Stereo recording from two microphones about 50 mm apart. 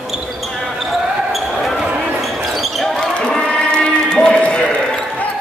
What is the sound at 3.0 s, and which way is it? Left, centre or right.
Run, centre.